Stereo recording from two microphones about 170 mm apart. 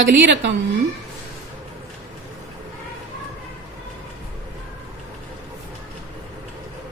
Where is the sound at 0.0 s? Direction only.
90° right.